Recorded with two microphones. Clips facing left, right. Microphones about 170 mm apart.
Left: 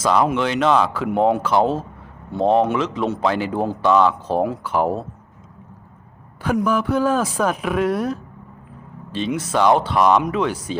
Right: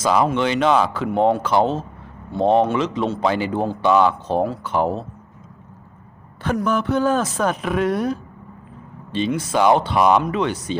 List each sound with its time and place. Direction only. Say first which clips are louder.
0.0 s speech: even; 5° right (ahead or behind)
6.7 s speech: right 1 dB; 5° left (ahead or behind)